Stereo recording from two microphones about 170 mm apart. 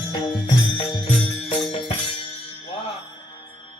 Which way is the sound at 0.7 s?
35° left (ahead or behind).